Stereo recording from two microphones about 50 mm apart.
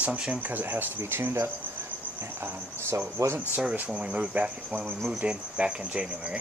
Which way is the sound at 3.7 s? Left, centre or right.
Right.